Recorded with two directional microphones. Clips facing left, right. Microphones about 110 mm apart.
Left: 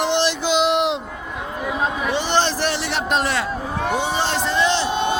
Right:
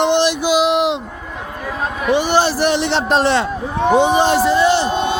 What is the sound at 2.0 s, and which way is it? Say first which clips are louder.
Speech: right 8 dB; 10° right (ahead or behind).